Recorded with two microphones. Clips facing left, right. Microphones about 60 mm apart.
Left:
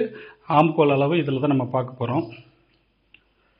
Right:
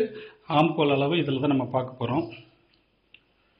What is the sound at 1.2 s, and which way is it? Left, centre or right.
Speech, left.